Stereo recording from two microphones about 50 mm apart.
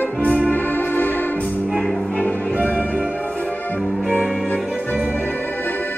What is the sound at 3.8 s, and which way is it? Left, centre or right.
Music, centre.